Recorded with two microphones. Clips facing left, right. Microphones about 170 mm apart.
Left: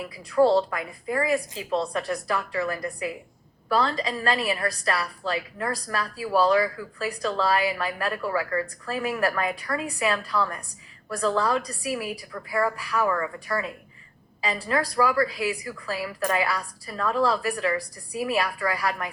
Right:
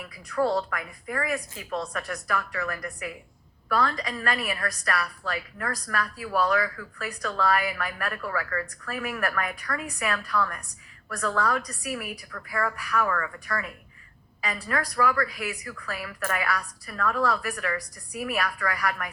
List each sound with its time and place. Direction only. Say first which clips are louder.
0.0 s a woman's voice: left 6 dB; 30° left (ahead or behind)